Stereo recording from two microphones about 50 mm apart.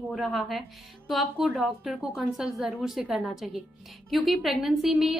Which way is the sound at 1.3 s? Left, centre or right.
Centre.